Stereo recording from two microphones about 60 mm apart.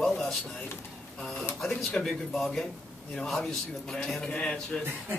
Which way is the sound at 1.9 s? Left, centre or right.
Centre.